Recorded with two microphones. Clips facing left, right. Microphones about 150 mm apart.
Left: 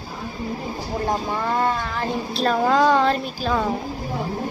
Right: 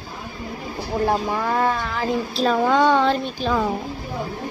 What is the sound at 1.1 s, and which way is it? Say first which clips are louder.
Speech: left 1 dB; centre (ahead or behind).